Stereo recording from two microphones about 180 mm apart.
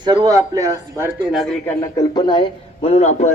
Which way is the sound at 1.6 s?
15° left (ahead or behind).